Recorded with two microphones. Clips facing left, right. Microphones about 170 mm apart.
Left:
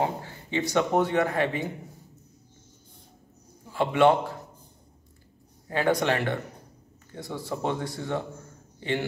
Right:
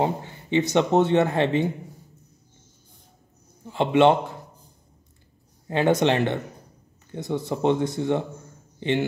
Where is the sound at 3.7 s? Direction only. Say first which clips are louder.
Right 3 dB; 20° right (ahead or behind).